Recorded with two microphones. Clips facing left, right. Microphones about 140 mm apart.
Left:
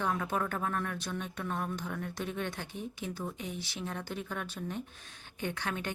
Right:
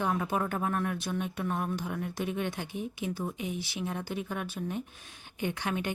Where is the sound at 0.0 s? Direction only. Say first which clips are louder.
Right 3 dB; 15° right (ahead or behind).